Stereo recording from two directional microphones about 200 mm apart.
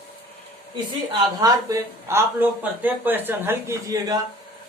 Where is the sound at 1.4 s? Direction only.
20° right (ahead or behind).